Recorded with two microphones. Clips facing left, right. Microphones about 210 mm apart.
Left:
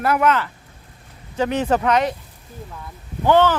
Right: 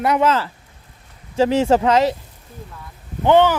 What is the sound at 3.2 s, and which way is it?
Speech, 15° right (ahead or behind).